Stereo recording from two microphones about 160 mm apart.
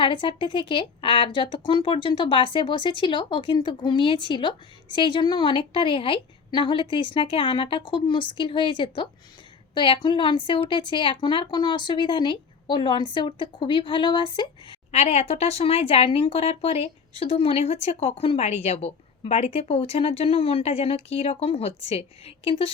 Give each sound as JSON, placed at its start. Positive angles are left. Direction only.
{"t": 0.0, "sound": "speech", "side_deg": 30}
{"t": 14.9, "sound": "speech", "side_deg": 40}